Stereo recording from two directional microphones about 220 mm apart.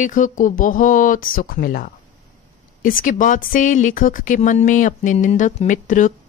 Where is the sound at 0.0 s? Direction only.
35° left (ahead or behind).